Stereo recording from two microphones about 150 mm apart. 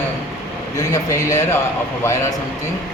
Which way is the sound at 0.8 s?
20° left (ahead or behind).